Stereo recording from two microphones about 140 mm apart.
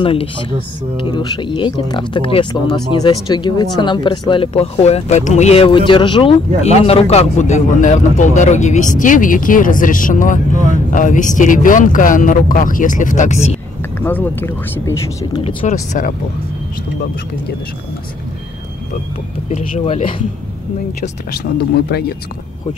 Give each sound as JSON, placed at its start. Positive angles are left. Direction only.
{"t": 0.0, "sound": "speech", "side_deg": 40}
{"t": 6.6, "sound": "speech", "side_deg": 50}
{"t": 14.0, "sound": "speech", "side_deg": 15}
{"t": 15.6, "sound": "speech", "side_deg": 60}
{"t": 19.5, "sound": "speech", "side_deg": 45}